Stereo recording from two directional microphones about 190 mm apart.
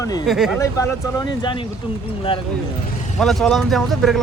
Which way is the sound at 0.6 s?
15° left (ahead or behind).